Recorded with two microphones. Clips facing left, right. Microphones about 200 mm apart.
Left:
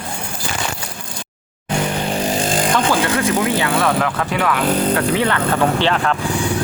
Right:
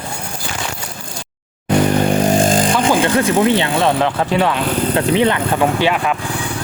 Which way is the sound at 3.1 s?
30° right (ahead or behind).